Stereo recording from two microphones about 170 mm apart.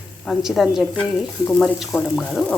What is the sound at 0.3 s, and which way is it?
Speech, centre (ahead or behind).